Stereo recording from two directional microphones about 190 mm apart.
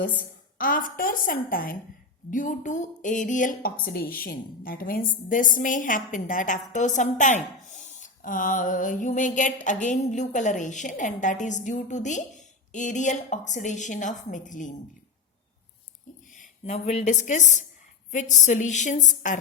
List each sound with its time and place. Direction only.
0.6 s a woman's voice: 50° left (ahead or behind)
16.3 s a woman's voice: 40° left (ahead or behind)